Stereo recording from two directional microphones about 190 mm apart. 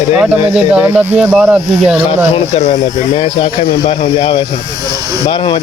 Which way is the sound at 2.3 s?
35° left (ahead or behind).